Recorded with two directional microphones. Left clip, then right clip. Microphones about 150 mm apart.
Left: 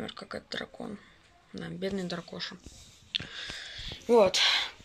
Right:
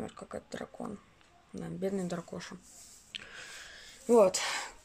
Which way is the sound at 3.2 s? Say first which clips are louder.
Left 7 dB; centre (ahead or behind).